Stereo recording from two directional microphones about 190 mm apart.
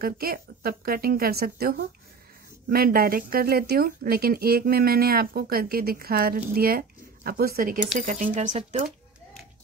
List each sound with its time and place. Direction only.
0.0 s speech: 50° right (ahead or behind)